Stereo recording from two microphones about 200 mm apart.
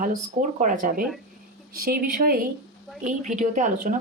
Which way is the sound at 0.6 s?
40° right (ahead or behind).